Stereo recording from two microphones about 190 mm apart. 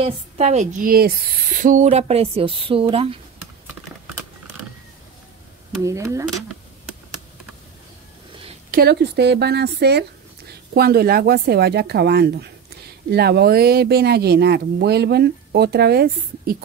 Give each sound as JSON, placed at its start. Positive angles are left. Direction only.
{"t": 0.0, "sound": "speech", "side_deg": -35}
{"t": 1.9, "sound": "a woman's voice", "side_deg": -35}
{"t": 5.8, "sound": "speech", "side_deg": -15}
{"t": 8.7, "sound": "speech", "side_deg": -60}